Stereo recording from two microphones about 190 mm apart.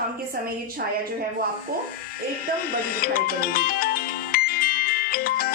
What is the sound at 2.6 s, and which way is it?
Music, 50° left (ahead or behind).